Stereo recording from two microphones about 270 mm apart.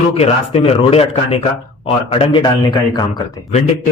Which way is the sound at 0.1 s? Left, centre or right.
Left.